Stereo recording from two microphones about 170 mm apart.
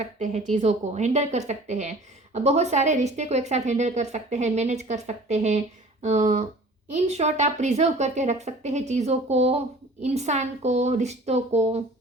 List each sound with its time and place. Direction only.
0.0 s a woman's voice: 40° right (ahead or behind)